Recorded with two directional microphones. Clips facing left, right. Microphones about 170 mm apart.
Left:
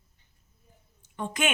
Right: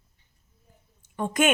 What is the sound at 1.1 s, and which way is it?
Speech, 50° right (ahead or behind).